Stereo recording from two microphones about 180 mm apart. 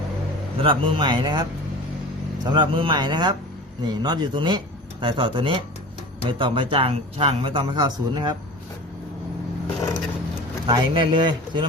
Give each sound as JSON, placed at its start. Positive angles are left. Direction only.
{"t": 0.6, "sound": "speech", "side_deg": -30}
{"t": 10.7, "sound": "speech", "side_deg": -25}